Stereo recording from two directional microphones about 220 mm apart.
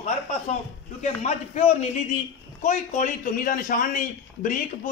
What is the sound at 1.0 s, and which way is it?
A man's voice, 30° left (ahead or behind).